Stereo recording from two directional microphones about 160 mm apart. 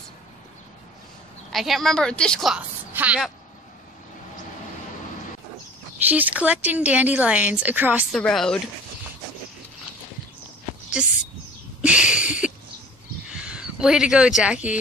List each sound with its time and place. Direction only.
1.5 s a woman's voice: centre (ahead or behind)
2.9 s a woman's voice: 10° right (ahead or behind)
6.0 s speech: 10° right (ahead or behind)
8.1 s a woman's voice: 5° left (ahead or behind)
11.0 s speech: 5° right (ahead or behind)
11.8 s a sound: 5° right (ahead or behind)
13.3 s speech: 5° right (ahead or behind)